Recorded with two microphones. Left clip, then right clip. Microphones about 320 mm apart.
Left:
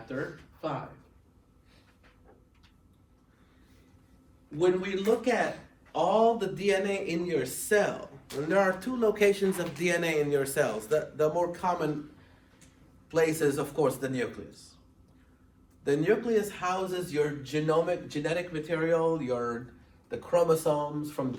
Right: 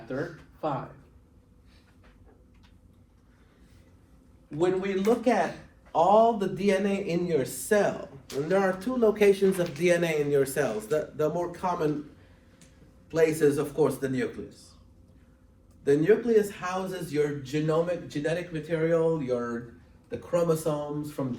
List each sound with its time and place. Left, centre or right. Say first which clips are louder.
4.6 s a man's voice: right 1 dB; centre
13.1 s a man's voice: right 3 dB; centre
15.8 s a man's voice: right 4 dB; centre